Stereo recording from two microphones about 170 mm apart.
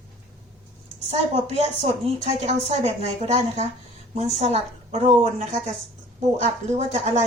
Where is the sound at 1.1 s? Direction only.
40° right (ahead or behind).